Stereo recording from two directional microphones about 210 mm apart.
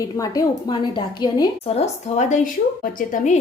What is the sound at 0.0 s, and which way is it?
A woman's voice, 15° left (ahead or behind).